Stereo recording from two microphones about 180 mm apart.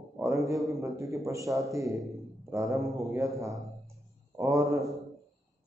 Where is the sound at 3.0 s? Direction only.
15° right (ahead or behind).